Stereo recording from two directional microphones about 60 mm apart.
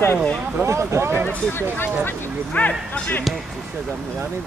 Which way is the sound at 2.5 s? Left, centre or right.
Left.